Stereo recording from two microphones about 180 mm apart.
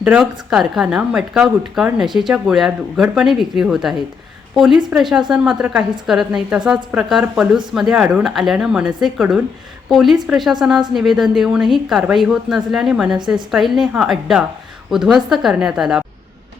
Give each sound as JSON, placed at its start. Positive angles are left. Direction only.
{"t": 0.0, "sound": "speech", "side_deg": -5}